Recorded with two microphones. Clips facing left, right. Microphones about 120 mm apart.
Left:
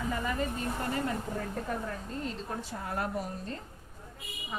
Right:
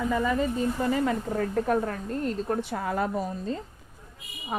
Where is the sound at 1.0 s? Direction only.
70° right (ahead or behind).